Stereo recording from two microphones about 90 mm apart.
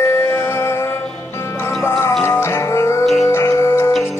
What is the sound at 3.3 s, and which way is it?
Music, 30° left (ahead or behind).